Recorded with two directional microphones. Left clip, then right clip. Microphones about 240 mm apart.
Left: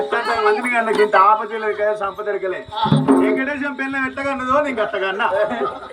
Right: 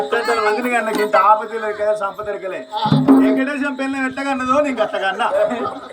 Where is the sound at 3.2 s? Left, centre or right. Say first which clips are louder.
Right 2 dB; left.